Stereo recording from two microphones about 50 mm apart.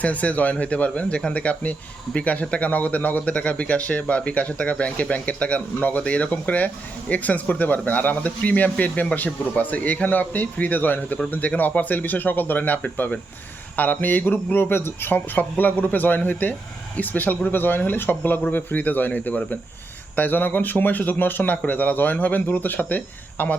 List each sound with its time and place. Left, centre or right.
0.0 s speech: left